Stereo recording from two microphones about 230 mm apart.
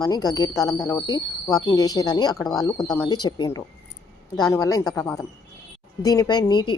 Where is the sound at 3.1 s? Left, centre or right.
Centre.